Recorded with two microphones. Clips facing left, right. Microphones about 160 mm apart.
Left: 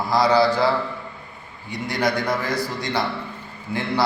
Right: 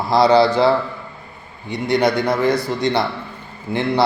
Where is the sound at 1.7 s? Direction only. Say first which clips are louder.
Right 6 dB; 25° right (ahead or behind).